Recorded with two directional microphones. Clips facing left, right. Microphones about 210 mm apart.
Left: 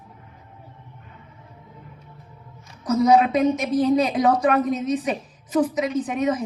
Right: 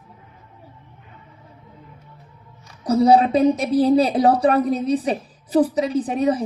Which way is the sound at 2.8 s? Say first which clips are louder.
Right 2 dB; 35° right (ahead or behind).